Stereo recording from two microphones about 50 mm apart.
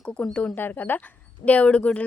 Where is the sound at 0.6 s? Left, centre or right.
Left.